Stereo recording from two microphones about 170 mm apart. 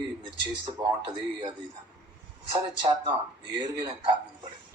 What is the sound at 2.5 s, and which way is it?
Speech, 30° right (ahead or behind).